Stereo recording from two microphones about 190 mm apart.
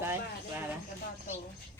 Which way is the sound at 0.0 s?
10° right (ahead or behind).